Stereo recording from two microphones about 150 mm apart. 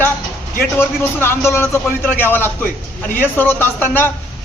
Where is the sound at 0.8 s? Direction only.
15° left (ahead or behind).